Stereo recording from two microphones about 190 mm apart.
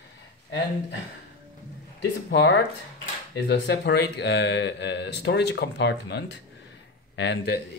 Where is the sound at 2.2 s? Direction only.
70° left (ahead or behind).